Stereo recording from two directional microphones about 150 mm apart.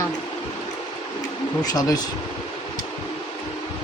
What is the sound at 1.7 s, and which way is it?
Speech, 25° left (ahead or behind).